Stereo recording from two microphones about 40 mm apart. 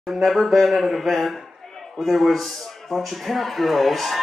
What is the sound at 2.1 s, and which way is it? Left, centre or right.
A man's voice, centre.